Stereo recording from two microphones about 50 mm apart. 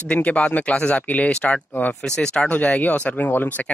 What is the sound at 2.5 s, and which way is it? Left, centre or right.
Speech, left.